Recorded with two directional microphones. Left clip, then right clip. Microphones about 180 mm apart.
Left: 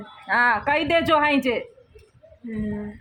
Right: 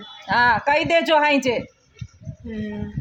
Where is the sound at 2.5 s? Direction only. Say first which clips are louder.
Even; centre (ahead or behind).